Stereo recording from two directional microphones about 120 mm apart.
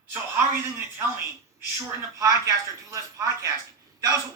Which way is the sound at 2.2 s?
25° right (ahead or behind).